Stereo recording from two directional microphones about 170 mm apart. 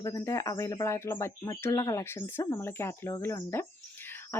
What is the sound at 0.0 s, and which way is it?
Speech, 15° left (ahead or behind).